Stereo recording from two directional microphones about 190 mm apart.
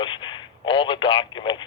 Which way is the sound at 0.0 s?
25° left (ahead or behind).